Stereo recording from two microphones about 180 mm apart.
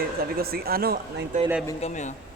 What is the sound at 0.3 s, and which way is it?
Speech, 55° right (ahead or behind).